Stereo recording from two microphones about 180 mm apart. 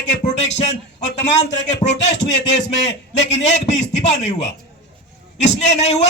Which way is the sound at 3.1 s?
40° left (ahead or behind).